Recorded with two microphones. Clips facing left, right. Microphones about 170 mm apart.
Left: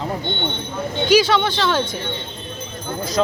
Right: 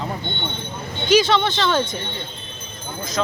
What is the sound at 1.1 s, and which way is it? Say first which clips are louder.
Speech: left 1 dB; 10° left (ahead or behind).